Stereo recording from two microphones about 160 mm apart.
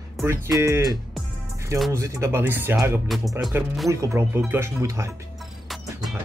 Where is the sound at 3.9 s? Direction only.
15° right (ahead or behind).